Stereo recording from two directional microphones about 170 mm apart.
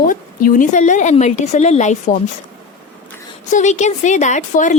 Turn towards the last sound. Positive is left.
turn(degrees=45)  # may be behind; listen again after turning